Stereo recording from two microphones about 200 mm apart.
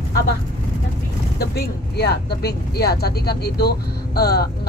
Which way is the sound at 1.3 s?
55° left (ahead or behind).